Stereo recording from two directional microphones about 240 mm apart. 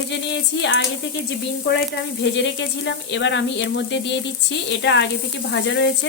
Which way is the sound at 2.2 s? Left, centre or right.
Left.